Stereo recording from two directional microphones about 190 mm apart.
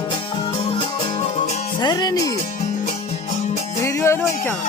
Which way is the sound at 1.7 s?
20° left (ahead or behind).